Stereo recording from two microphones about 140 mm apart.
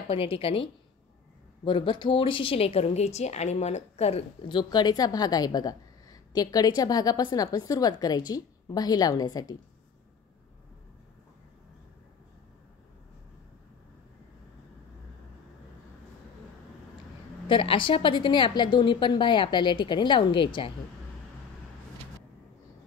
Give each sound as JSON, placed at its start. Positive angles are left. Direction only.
{"t": 0.1, "sound": "a woman's voice", "side_deg": 40}
{"t": 17.5, "sound": "a woman's voice", "side_deg": 40}